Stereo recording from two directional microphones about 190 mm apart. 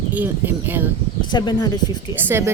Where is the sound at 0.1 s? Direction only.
10° right (ahead or behind).